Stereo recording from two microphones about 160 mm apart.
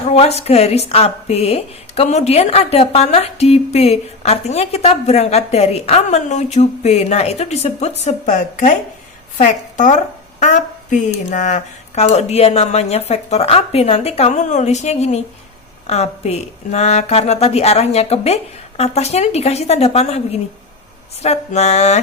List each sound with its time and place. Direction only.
0.1 s speech: 40° left (ahead or behind)